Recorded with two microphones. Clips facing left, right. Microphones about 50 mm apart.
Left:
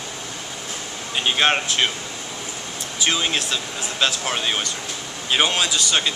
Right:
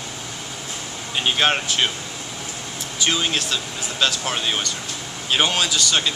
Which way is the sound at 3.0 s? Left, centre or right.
Centre.